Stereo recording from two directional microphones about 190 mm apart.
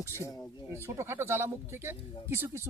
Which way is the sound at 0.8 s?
15° right (ahead or behind).